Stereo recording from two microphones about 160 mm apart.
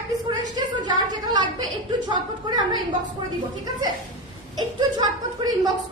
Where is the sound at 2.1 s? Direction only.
25° right (ahead or behind).